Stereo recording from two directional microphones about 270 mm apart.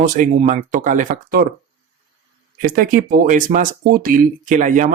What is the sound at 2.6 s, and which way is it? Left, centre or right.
Speech, right.